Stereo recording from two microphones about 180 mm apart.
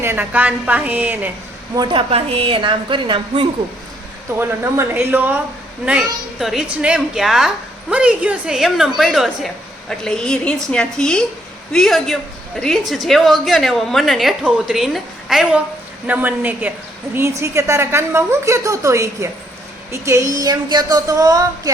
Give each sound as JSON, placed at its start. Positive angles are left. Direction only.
{"t": 0.0, "sound": "a woman's voice", "side_deg": -10}
{"t": 1.7, "sound": "speech", "side_deg": -25}
{"t": 4.4, "sound": "a woman's voice", "side_deg": -15}
{"t": 6.4, "sound": "a woman's voice", "side_deg": 0}